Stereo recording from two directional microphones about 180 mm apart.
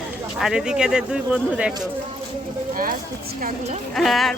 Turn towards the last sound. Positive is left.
turn(degrees=0)  # may be behind; listen again after turning